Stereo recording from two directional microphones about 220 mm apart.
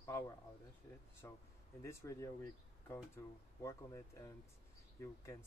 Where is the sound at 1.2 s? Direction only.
15° left (ahead or behind).